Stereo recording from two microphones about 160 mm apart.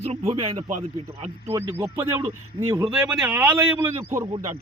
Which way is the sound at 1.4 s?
20° right (ahead or behind).